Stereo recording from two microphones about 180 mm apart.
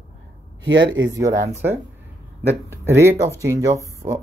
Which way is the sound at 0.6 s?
90° right.